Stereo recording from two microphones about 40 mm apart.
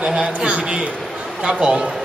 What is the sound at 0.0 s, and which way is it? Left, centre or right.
A man's voice, right.